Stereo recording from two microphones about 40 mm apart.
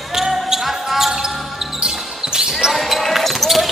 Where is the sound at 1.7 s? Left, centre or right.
Centre.